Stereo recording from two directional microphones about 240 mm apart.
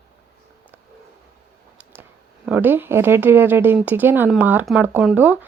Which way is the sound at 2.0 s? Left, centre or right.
Centre.